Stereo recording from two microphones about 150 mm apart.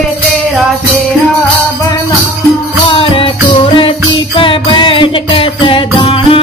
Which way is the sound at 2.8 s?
35° left (ahead or behind).